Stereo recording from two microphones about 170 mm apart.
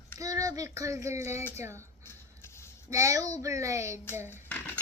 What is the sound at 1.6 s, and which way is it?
Speech, 15° right (ahead or behind).